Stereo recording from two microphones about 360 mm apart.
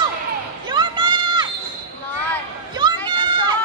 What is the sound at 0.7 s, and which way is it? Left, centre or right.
Run, centre.